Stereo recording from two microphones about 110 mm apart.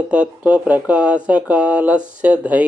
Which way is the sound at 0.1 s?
15° right (ahead or behind).